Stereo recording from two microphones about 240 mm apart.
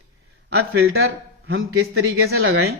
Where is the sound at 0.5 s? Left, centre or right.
Right.